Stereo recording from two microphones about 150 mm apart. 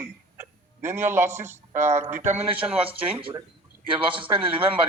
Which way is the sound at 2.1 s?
50° right (ahead or behind).